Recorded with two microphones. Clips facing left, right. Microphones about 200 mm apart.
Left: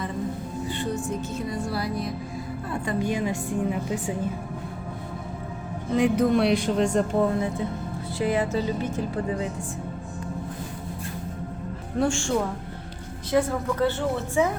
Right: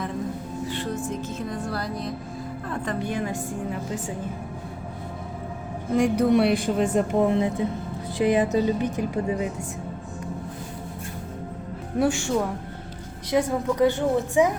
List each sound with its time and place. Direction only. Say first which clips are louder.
1.5 s a woman's voice: left 2 dB; 10° left (ahead or behind)
5.9 s speech: right 1 dB; centre (ahead or behind)
7.2 s speech: right 2 dB; 20° right (ahead or behind)
11.9 s speech: right 1 dB; 5° right (ahead or behind)